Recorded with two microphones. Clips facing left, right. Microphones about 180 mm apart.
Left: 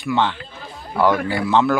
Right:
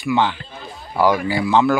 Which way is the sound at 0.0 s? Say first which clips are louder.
Right 1 dB; 5° right (ahead or behind).